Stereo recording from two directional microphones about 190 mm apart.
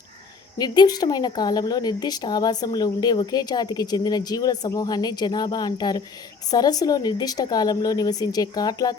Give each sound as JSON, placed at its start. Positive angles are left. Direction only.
{"t": 0.6, "sound": "a woman's voice", "side_deg": 20}